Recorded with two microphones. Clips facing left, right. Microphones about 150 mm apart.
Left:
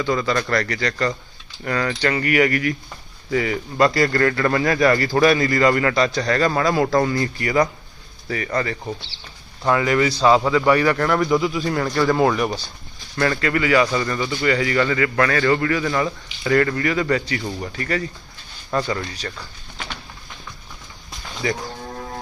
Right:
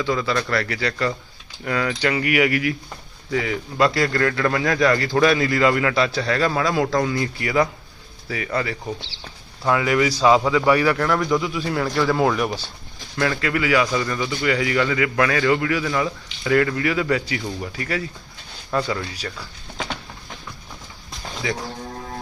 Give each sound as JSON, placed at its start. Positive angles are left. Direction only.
{"t": 0.0, "sound": "a man's voice", "side_deg": 0}
{"t": 21.4, "sound": "speech", "side_deg": 0}